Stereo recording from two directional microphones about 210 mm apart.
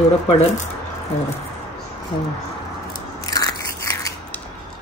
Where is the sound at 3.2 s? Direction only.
15° left (ahead or behind).